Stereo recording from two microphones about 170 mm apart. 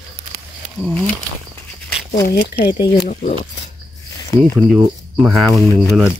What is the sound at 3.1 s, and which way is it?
Speech, 45° left (ahead or behind).